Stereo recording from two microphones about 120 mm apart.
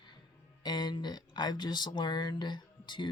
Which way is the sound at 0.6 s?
40° left (ahead or behind).